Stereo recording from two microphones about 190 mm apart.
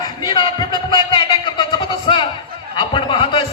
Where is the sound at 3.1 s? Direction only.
25° left (ahead or behind).